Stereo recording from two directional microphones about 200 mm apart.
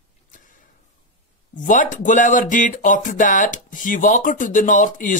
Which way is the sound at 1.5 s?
40° left (ahead or behind).